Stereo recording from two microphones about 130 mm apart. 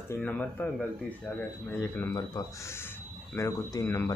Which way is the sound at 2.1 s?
25° left (ahead or behind).